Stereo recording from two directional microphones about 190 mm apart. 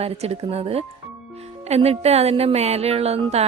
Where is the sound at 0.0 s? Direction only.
30° right (ahead or behind).